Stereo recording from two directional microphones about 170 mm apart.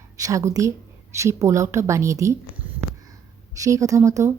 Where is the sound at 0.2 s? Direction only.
20° right (ahead or behind).